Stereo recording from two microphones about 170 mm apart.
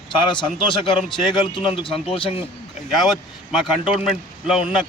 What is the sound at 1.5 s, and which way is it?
Speech, 30° left (ahead or behind).